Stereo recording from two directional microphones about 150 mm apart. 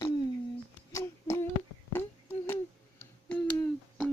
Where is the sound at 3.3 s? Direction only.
10° left (ahead or behind).